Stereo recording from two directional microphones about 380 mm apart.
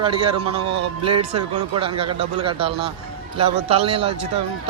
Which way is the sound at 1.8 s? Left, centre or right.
Centre.